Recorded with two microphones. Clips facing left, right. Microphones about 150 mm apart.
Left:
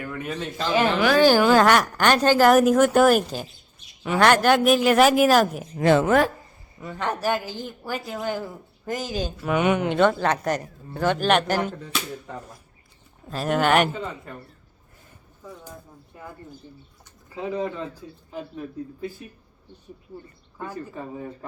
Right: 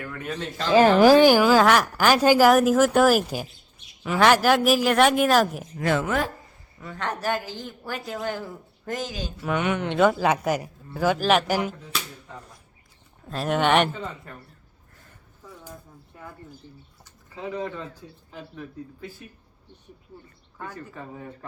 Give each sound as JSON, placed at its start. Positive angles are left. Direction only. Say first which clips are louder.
{"t": 0.0, "sound": "speech", "louder": "left 2 dB", "side_deg": 10}
{"t": 0.7, "sound": "speech", "louder": "right 6 dB", "side_deg": -35}
{"t": 1.2, "sound": "speech", "louder": "even", "side_deg": -10}
{"t": 5.7, "sound": "speech", "louder": "left 6 dB", "side_deg": 30}
{"t": 6.7, "sound": "speech", "louder": "left 3 dB", "side_deg": 15}
{"t": 9.9, "sound": "speech", "louder": "even", "side_deg": -5}
{"t": 13.2, "sound": "speech", "louder": "left 1 dB", "side_deg": 0}
{"t": 17.3, "sound": "speech", "louder": "left 3 dB", "side_deg": 5}
{"t": 20.6, "sound": "speech", "louder": "left 4 dB", "side_deg": 15}